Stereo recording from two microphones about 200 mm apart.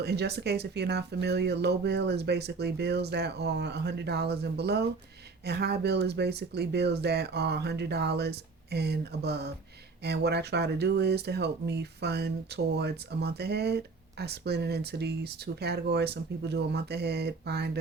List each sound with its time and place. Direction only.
0.0 s speech: 55° right (ahead or behind)